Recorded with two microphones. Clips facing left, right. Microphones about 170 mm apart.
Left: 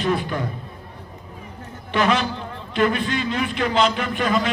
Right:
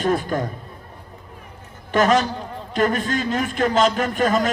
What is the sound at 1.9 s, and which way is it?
A man's voice, 45° right (ahead or behind).